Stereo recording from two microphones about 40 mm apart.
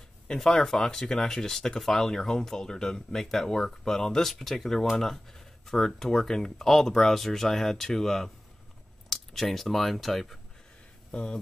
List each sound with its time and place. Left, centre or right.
0.3 s speech: centre
11.1 s speech: left